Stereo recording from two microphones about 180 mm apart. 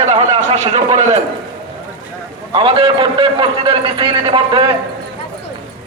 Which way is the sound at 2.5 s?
30° right (ahead or behind).